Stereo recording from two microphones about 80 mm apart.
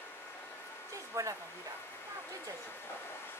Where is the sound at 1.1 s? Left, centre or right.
Right.